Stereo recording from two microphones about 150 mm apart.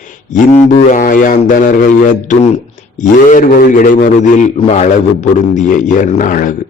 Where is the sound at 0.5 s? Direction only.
60° left (ahead or behind).